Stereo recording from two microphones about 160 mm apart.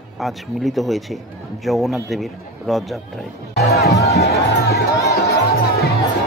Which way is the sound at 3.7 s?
90° left.